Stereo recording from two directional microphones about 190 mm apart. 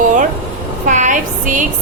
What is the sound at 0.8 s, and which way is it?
Speech, 40° right (ahead or behind).